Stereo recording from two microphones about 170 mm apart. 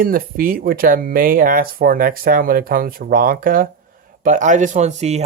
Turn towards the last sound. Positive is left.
turn(degrees=-40)  # may be behind; listen again after turning